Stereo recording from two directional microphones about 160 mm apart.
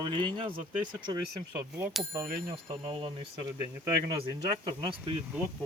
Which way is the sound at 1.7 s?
Centre (ahead or behind).